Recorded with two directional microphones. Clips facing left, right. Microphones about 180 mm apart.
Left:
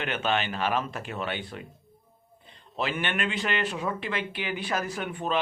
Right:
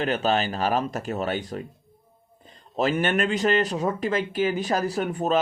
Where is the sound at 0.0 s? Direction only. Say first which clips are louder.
Right 5 dB; 40° right (ahead or behind).